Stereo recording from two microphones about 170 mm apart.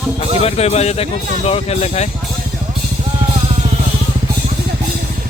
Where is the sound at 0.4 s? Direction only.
40° left (ahead or behind).